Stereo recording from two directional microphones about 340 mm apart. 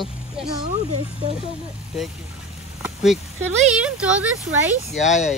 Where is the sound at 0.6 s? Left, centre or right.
Centre.